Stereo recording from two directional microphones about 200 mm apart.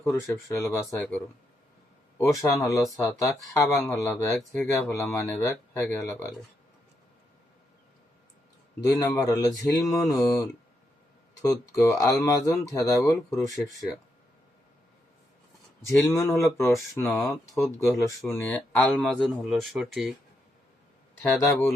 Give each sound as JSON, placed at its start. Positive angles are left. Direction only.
{"t": 0.0, "sound": "speech", "side_deg": 15}
{"t": 2.8, "sound": "speech", "side_deg": 0}
{"t": 3.2, "sound": "speech", "side_deg": 15}
{"t": 8.8, "sound": "speech", "side_deg": 15}
{"t": 13.5, "sound": "speech", "side_deg": 0}
{"t": 15.9, "sound": "speech", "side_deg": 15}
{"t": 21.2, "sound": "speech", "side_deg": 10}